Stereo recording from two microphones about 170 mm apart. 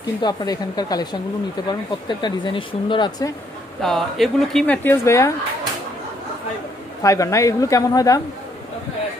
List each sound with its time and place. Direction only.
0.2 s speech: 25° left (ahead or behind)
3.8 s speech: centre (ahead or behind); by 5.3 s 15° left (ahead or behind)
7.0 s speech: 20° left (ahead or behind)